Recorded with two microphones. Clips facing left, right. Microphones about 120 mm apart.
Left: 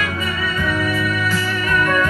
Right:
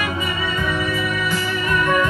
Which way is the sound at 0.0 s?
15° right (ahead or behind).